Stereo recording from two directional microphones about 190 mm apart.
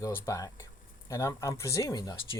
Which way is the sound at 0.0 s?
15° left (ahead or behind).